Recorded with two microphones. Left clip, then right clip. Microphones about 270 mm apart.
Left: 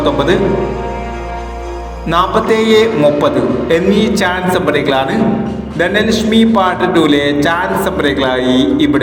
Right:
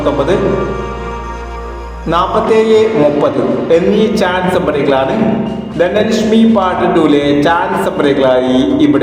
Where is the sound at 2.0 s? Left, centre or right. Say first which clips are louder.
Even; left.